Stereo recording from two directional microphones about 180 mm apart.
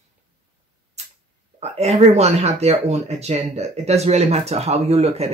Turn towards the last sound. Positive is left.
turn(degrees=-35)  # may be behind; listen again after turning